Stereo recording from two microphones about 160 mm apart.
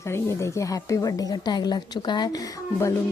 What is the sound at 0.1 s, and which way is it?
Speech, 15° left (ahead or behind).